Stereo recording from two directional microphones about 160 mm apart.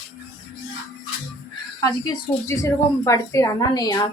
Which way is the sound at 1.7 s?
20° left (ahead or behind).